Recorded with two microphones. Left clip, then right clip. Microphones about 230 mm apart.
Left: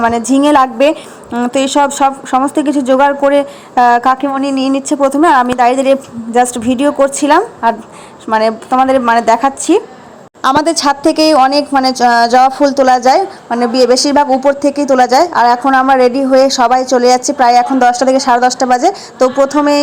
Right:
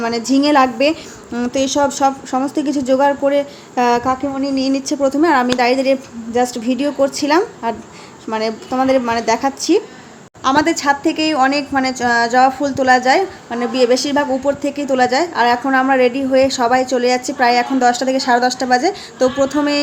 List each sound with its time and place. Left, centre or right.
0.0 s a woman's voice: centre
10.4 s a woman's voice: left
16.7 s a woman's voice: centre
17.2 s a woman's voice: centre
18.3 s a woman's voice: centre